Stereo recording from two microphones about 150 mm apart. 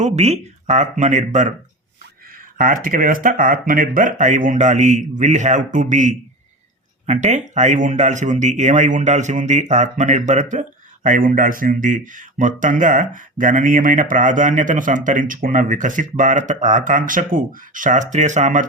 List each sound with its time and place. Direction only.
0.0 s speech: 50° right (ahead or behind)
2.6 s speech: 65° right (ahead or behind)